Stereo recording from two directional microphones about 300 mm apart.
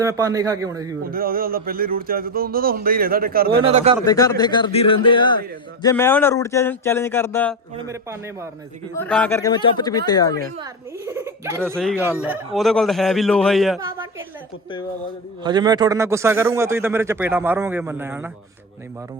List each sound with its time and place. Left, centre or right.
0.0 s a man's voice: centre
1.0 s speech: right
4.0 s speech: centre
7.9 s a man's voice: centre
9.0 s speech: centre
10.6 s a man's voice: centre
13.7 s a woman's voice: centre
15.4 s a man's voice: centre